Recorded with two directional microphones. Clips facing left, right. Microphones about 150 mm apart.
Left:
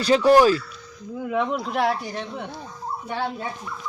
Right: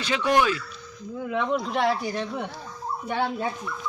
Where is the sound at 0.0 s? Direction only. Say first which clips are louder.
Left 7 dB; 35° left (ahead or behind).